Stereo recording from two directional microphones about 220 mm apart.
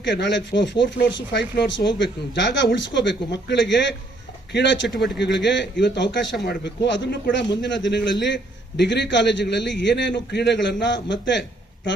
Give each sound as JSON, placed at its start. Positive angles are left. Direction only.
{"t": 0.1, "sound": "a man's voice", "side_deg": 55}
{"t": 4.9, "sound": "a man's voice", "side_deg": 0}
{"t": 5.4, "sound": "a man's voice", "side_deg": 55}